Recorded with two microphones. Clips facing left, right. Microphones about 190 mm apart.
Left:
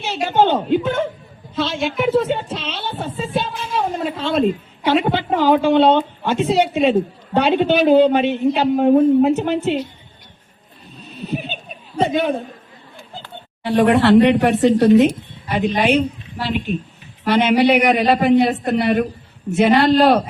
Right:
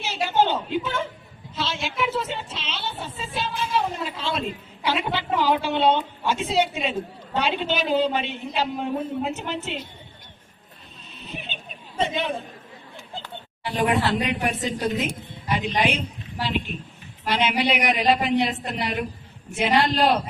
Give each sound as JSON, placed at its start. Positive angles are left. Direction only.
{"t": 0.0, "sound": "speech", "side_deg": 50}
{"t": 3.2, "sound": "music", "side_deg": 50}
{"t": 3.7, "sound": "a woman's voice", "side_deg": 55}
{"t": 11.3, "sound": "speech", "side_deg": 45}
{"t": 13.6, "sound": "speech", "side_deg": 60}
{"t": 15.5, "sound": "speech", "side_deg": 50}
{"t": 17.2, "sound": "speech", "side_deg": 50}